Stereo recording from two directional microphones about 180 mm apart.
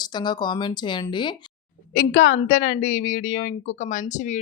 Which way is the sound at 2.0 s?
50° left (ahead or behind).